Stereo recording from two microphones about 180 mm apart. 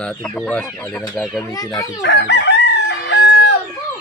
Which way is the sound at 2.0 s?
70° left (ahead or behind).